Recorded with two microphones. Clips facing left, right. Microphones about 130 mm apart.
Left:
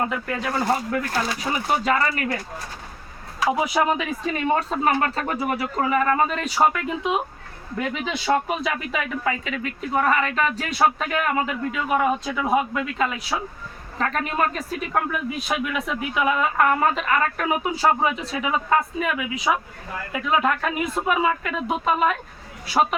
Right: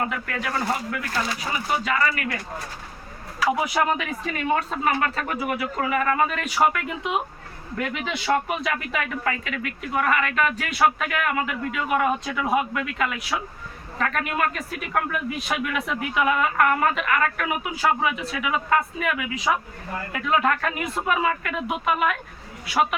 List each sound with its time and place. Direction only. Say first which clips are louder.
0.0 s speech: left 2 dB; 25° left (ahead or behind)
3.4 s speech: left 1 dB; 25° left (ahead or behind)